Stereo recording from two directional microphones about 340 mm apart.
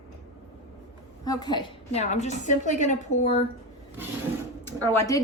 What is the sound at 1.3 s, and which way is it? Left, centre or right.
A woman's voice, centre.